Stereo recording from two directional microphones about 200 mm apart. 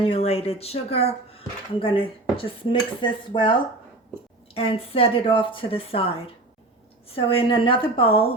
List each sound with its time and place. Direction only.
0.0 s speech: 30° left (ahead or behind)
4.5 s speech: 30° left (ahead or behind)